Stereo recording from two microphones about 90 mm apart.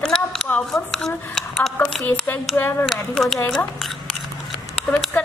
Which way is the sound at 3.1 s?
5° left (ahead or behind).